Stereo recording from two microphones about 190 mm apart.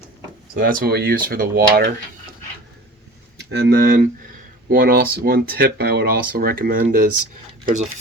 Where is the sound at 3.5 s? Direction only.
60° right (ahead or behind).